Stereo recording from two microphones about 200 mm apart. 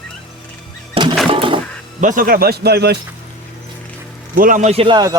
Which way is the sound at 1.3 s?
25° right (ahead or behind).